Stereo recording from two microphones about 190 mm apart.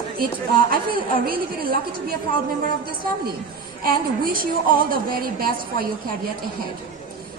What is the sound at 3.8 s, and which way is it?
A woman's voice, 50° right (ahead or behind).